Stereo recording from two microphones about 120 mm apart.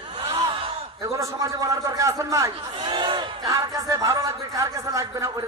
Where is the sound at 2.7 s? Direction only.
45° right (ahead or behind).